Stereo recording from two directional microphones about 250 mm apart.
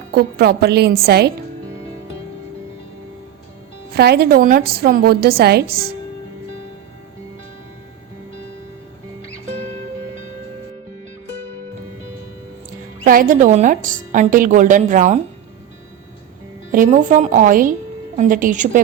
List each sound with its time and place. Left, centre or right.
0.1 s a woman's voice: right
3.9 s a woman's voice: right
13.1 s a woman's voice: right
16.7 s a woman's voice: right